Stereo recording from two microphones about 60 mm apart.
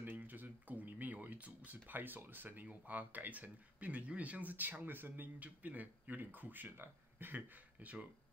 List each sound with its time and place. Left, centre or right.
0.0 s speech: right